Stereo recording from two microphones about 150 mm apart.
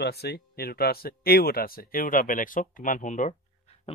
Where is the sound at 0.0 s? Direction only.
90° left; by 3.3 s 55° left (ahead or behind).